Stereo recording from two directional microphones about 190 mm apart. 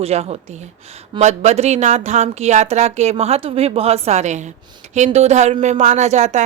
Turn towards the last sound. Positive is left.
turn(degrees=-35)  # may be behind; listen again after turning